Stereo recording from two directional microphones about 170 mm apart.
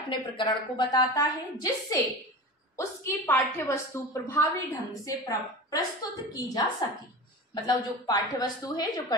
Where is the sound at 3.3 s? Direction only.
15° left (ahead or behind).